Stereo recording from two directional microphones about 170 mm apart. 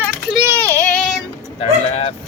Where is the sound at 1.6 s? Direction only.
35° left (ahead or behind).